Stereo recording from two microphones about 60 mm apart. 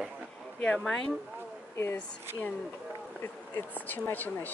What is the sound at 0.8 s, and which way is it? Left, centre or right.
Speech, centre.